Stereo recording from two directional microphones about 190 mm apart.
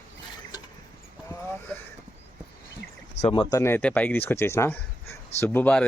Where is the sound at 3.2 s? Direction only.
35° left (ahead or behind).